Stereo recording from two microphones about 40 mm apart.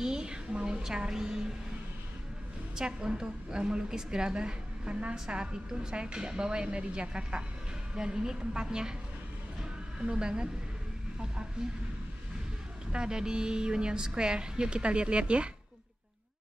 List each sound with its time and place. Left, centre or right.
0.0 s a woman's voice: centre
2.7 s a woman's voice: centre
9.9 s a woman's voice: right
11.6 s a woman's voice: centre
12.9 s a woman's voice: right